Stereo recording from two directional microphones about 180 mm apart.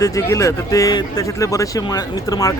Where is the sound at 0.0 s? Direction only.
15° left (ahead or behind).